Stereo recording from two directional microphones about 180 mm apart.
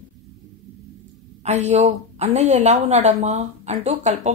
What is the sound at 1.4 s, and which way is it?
Speech, 40° right (ahead or behind).